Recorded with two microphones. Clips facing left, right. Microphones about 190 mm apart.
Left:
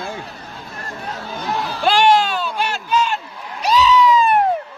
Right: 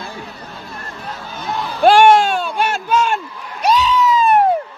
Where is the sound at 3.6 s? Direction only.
55° right (ahead or behind).